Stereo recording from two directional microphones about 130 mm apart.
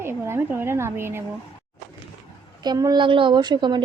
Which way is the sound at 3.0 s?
40° right (ahead or behind).